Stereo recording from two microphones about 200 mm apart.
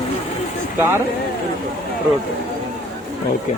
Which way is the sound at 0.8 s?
10° right (ahead or behind).